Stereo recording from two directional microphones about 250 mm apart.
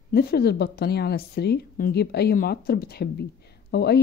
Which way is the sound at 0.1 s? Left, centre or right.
Left.